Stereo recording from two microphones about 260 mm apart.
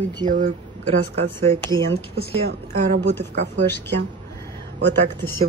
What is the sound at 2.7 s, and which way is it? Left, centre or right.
Speech, right.